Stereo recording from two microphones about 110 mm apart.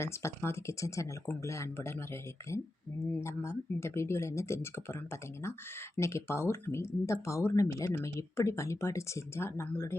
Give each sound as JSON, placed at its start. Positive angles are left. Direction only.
{"t": 0.0, "sound": "speech", "side_deg": 25}
{"t": 3.1, "sound": "speech", "side_deg": 25}
{"t": 6.0, "sound": "speech", "side_deg": 25}